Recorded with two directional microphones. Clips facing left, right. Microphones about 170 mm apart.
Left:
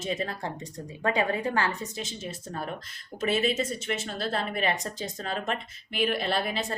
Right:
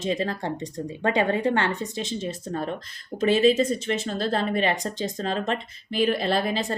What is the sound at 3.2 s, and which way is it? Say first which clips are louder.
A woman's voice: right 7 dB; 35° right (ahead or behind).